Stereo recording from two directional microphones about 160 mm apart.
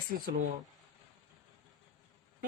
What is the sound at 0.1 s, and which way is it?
Speech, 65° right (ahead or behind).